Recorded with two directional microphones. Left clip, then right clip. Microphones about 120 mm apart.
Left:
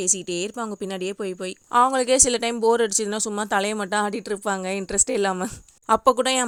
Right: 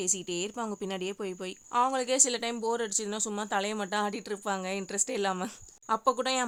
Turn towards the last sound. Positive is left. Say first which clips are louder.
# left 9 dB
turn(degrees=55)  # may be behind; listen again after turning